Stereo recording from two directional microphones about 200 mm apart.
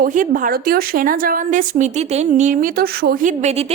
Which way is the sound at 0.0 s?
40° right (ahead or behind).